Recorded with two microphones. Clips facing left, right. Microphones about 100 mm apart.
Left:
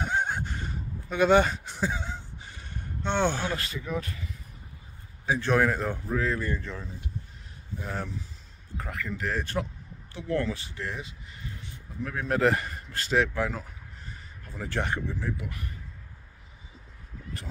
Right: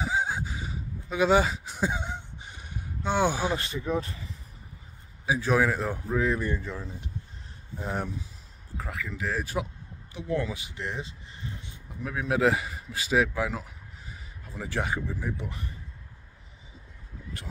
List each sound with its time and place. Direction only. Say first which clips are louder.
0.0 s a sound: even; 5° right (ahead or behind)
1.8 s a sound: right 2 dB; 15° right (ahead or behind)
3.5 s speech: right 3 dB; 25° right (ahead or behind)
5.2 s speech: even; 5° right (ahead or behind)
6.1 s speech: right 3 dB; 15° right (ahead or behind)
8.7 s speech: left 1 dB; centre (ahead or behind); by 11.7 s 25° right (ahead or behind)
12.0 s speech: even; 5° right (ahead or behind)
15.3 s speech: right 1 dB; 25° right (ahead or behind)